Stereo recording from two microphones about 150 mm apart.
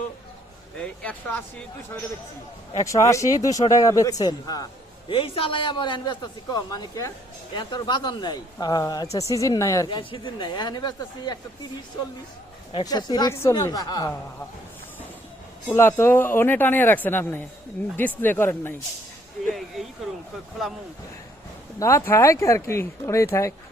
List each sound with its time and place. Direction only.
0.8 s speech: 10° left (ahead or behind)
2.8 s speech: 20° left (ahead or behind)
5.0 s a man's voice: 40° left (ahead or behind)
12.7 s speech: 25° left (ahead or behind)
15.7 s speech: 15° left (ahead or behind)
19.5 s a sound: centre (ahead or behind)
20.6 s speech: centre (ahead or behind)
21.8 s speech: 20° left (ahead or behind)